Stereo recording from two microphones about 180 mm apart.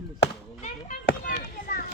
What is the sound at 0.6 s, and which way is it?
Chop, 45° left (ahead or behind).